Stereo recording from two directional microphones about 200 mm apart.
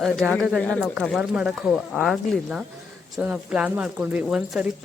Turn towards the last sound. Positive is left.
turn(degrees=-5)  # may be behind; listen again after turning